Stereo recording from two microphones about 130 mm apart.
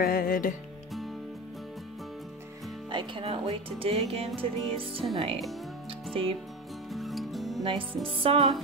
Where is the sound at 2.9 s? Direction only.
40° right (ahead or behind).